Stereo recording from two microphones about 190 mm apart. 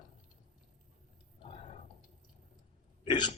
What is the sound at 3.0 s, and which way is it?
Hiccup, 25° left (ahead or behind).